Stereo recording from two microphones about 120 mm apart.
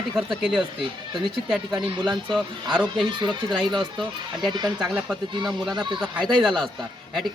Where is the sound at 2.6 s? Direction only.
40° right (ahead or behind).